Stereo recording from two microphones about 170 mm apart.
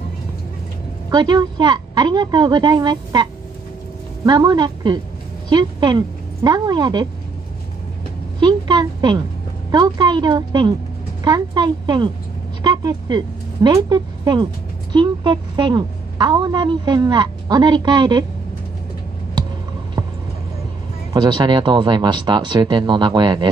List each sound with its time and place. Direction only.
1.1 s speech: 25° right (ahead or behind)
8.4 s a sound: 25° right (ahead or behind)
9.7 s speech: 25° right (ahead or behind)
20.0 s music: 20° right (ahead or behind)
21.1 s speech: 25° right (ahead or behind)